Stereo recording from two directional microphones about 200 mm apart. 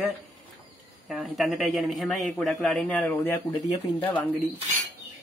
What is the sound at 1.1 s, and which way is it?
Speech, centre (ahead or behind).